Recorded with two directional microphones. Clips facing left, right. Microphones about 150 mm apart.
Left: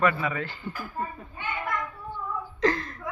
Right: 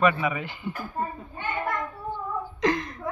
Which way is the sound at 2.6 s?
15° right (ahead or behind).